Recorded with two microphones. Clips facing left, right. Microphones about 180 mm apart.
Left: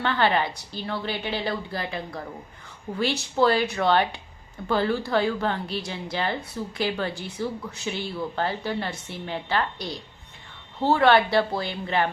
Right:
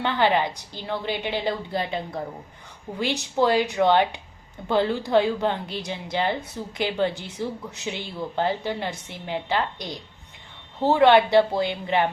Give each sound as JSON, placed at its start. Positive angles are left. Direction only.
{"t": 0.0, "sound": "a woman's voice", "side_deg": -20}